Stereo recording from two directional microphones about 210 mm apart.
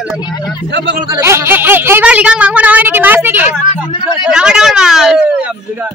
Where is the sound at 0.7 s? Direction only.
55° right (ahead or behind).